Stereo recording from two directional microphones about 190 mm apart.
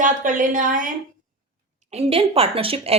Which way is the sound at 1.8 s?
30° right (ahead or behind).